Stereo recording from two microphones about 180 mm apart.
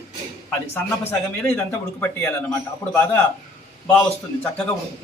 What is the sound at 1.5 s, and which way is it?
Speech, 10° left (ahead or behind).